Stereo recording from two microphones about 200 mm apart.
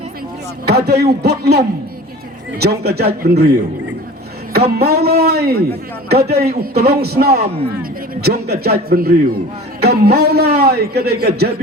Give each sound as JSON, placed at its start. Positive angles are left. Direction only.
{"t": 0.7, "sound": "a man's voice", "side_deg": -55}
{"t": 4.7, "sound": "a man's voice", "side_deg": -50}